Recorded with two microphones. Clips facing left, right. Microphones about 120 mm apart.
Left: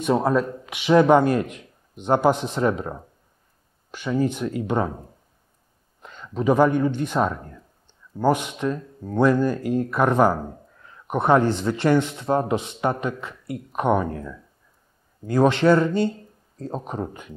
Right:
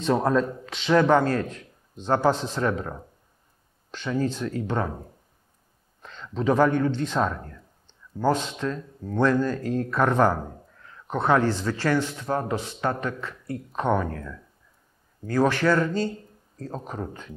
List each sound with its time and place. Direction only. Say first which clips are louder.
0.0 s speech: left 2 dB; 5° left (ahead or behind)
6.0 s a man's voice: left 3 dB; 10° left (ahead or behind)